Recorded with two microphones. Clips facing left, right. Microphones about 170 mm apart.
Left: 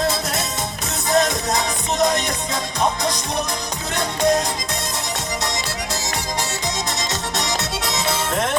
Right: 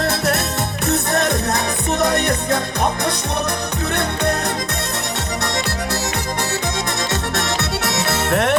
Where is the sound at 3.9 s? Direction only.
60° right (ahead or behind).